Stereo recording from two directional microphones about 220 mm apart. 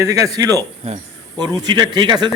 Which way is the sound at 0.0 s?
15° right (ahead or behind).